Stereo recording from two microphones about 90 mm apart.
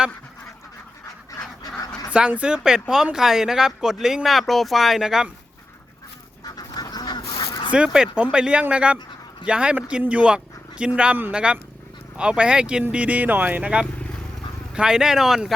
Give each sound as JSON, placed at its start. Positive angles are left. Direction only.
{"t": 1.0, "sound": "duck", "side_deg": 40}
{"t": 2.1, "sound": "speech", "side_deg": -10}
{"t": 6.4, "sound": "duck", "side_deg": 45}
{"t": 7.7, "sound": "speech", "side_deg": -10}